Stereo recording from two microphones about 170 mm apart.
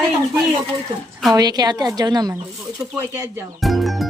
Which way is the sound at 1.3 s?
25° right (ahead or behind).